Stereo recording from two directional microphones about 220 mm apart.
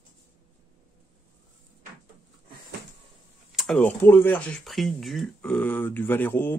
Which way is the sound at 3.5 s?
Centre (ahead or behind).